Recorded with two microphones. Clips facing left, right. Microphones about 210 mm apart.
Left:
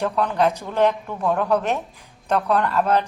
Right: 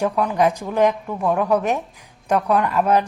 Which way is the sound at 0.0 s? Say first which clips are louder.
Right 2 dB; 10° right (ahead or behind).